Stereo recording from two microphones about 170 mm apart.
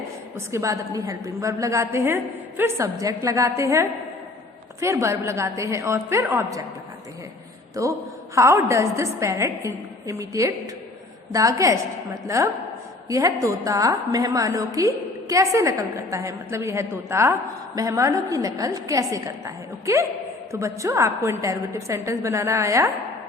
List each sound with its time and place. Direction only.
0.3 s a woman's voice: 15° right (ahead or behind)
7.8 s a woman's voice: 20° right (ahead or behind)